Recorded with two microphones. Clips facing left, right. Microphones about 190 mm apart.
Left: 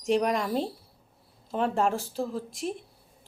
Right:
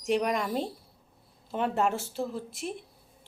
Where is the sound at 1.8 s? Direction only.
35° left (ahead or behind).